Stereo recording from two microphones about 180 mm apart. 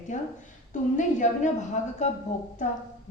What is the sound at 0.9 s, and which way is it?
A woman's voice, 45° left (ahead or behind).